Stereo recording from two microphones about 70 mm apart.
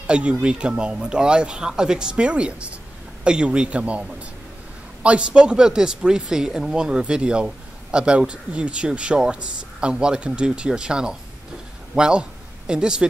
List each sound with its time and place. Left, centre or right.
0.0 s speech: centre
5.0 s a man's voice: centre